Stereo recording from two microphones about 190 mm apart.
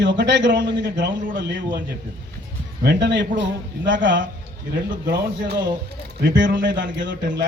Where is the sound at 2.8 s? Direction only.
70° right (ahead or behind).